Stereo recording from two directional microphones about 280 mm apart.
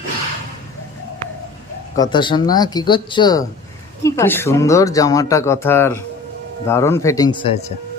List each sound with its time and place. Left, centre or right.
2.0 s speech: centre